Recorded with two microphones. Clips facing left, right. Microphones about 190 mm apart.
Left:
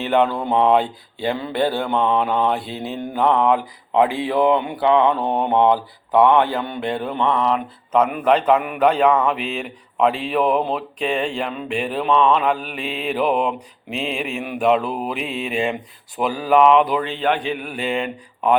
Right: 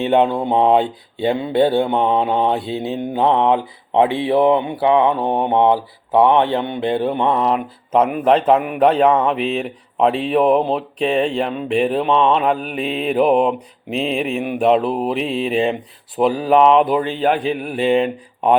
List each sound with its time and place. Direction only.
0.0 s mantra: 25° right (ahead or behind)
7.3 s speech: 35° right (ahead or behind)